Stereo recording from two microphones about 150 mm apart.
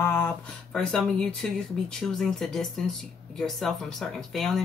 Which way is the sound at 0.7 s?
5° left (ahead or behind).